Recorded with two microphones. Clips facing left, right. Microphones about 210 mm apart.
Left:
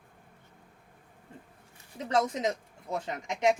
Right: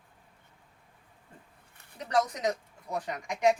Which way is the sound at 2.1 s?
25° left (ahead or behind).